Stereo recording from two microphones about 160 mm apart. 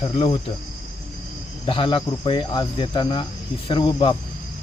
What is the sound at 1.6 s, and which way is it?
Cricket, 30° left (ahead or behind).